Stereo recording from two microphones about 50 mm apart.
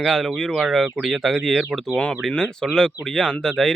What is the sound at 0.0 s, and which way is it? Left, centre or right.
Speech, centre.